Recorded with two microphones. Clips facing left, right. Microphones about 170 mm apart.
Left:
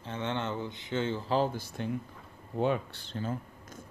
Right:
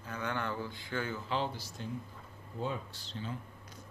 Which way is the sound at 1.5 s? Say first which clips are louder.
Left 7 dB; 60° left (ahead or behind).